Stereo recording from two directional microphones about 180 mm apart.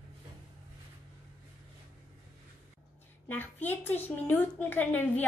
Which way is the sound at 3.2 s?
10° left (ahead or behind).